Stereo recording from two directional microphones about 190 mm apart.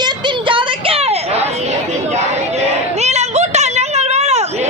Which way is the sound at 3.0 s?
35° right (ahead or behind).